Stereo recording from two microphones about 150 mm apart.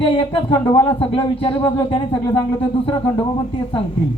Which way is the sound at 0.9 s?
40° left (ahead or behind).